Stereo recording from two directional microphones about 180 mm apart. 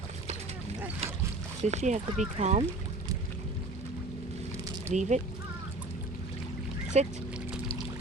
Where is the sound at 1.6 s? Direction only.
40° right (ahead or behind).